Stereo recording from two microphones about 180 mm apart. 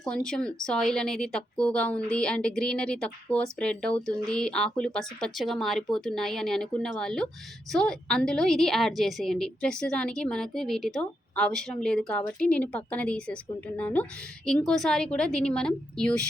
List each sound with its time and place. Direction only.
0.0 s a woman's voice: 5° left (ahead or behind)